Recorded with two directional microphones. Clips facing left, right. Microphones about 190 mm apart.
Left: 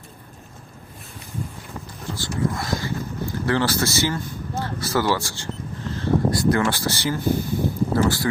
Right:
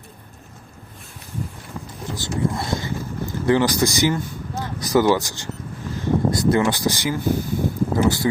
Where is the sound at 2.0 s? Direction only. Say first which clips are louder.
Right 1 dB; 20° right (ahead or behind).